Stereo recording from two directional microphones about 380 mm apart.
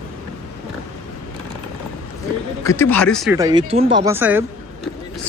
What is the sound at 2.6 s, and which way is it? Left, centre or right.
Speech, centre.